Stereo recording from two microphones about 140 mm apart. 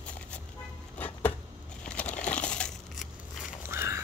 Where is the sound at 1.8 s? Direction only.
10° left (ahead or behind).